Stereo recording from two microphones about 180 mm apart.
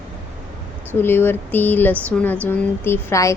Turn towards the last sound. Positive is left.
turn(degrees=15)  # may be behind; listen again after turning